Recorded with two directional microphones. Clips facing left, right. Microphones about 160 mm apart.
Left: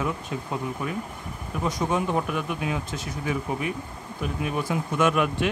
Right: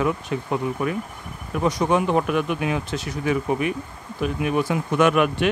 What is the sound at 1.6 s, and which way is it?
Speech, 75° right (ahead or behind).